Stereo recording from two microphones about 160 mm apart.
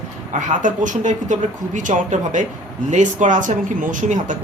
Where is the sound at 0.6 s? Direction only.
50° right (ahead or behind).